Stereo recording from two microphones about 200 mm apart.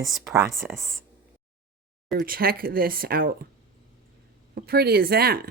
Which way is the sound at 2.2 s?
45° right (ahead or behind).